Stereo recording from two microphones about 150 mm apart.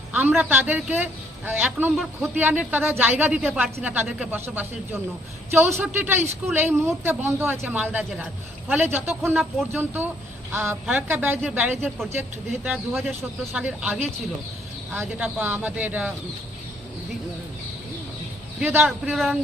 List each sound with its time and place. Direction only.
0.1 s a man's voice: 10° right (ahead or behind)
18.6 s a man's voice: 15° right (ahead or behind)
18.9 s speech: centre (ahead or behind)